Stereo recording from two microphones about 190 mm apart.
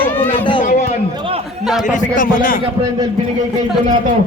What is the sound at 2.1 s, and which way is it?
Speech, 45° left (ahead or behind).